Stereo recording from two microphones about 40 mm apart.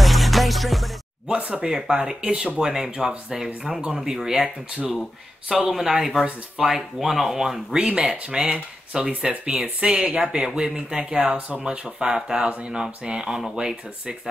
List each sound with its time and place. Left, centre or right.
0.0 s music: centre
1.4 s speech: right
1.7 s speech: centre
4.4 s speech: right
5.6 s speech: centre
11.3 s speech: right
11.6 s speech: right
12.4 s speech: right
12.7 s speech: right